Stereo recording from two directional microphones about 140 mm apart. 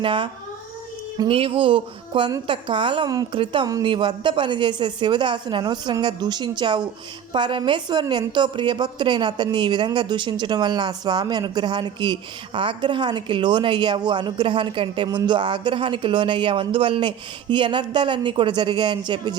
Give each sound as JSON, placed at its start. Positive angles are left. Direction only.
{"t": 0.0, "sound": "speech", "side_deg": -35}
{"t": 1.3, "sound": "speech", "side_deg": -40}